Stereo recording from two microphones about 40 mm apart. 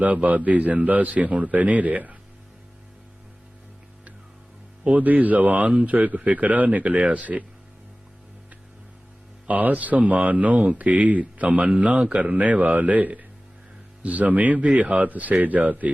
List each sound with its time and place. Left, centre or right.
0.0 s a man's voice: right
4.9 s a man's voice: right
9.5 s a man's voice: right